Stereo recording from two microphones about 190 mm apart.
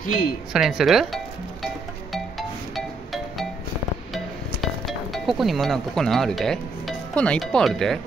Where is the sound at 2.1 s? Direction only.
Centre (ahead or behind).